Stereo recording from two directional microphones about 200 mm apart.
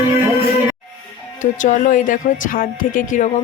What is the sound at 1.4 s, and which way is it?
Speech, 40° left (ahead or behind).